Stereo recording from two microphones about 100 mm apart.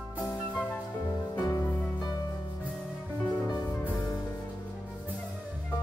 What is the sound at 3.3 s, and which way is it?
Music, 35° left (ahead or behind).